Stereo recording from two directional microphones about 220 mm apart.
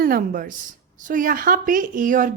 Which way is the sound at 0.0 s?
40° right (ahead or behind).